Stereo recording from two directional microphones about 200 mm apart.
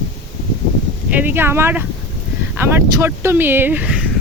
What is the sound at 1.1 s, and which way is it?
Speech, 10° right (ahead or behind).